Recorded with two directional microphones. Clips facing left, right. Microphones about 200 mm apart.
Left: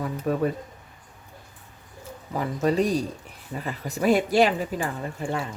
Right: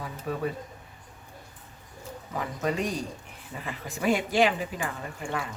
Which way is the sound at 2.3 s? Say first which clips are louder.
Left 6 dB; 35° left (ahead or behind).